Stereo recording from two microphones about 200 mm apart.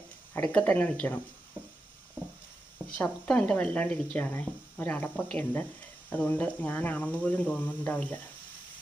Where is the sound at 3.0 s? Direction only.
5° left (ahead or behind).